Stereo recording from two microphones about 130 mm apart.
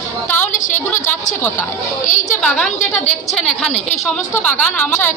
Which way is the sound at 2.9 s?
55° left (ahead or behind).